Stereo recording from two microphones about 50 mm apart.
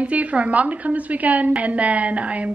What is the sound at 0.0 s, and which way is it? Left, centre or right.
A woman's voice, right.